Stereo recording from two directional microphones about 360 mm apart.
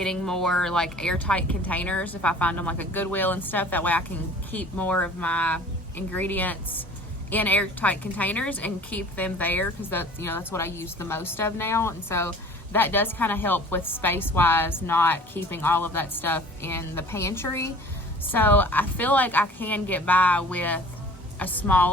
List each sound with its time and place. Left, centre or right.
0.0 s a woman's voice: centre